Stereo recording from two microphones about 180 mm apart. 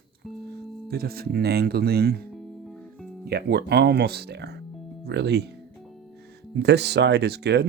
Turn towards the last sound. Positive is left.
turn(degrees=-65)  # may be behind; listen again after turning